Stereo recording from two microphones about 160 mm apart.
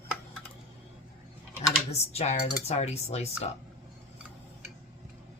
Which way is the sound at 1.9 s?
40° left (ahead or behind).